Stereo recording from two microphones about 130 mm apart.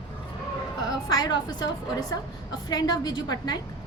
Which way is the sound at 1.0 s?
30° left (ahead or behind).